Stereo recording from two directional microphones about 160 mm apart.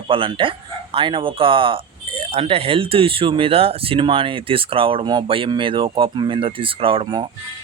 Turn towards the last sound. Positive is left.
turn(degrees=-30)  # may be behind; listen again after turning